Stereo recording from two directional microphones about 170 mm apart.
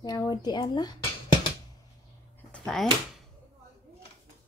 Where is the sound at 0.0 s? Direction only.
25° left (ahead or behind).